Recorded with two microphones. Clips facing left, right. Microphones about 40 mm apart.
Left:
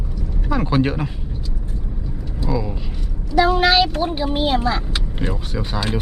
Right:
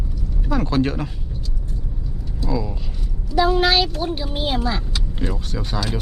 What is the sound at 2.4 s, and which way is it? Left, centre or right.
Speech, centre.